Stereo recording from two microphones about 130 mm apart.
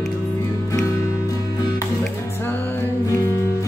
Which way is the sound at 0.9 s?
25° left (ahead or behind).